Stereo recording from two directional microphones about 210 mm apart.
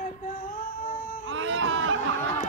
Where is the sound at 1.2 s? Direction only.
65° right (ahead or behind).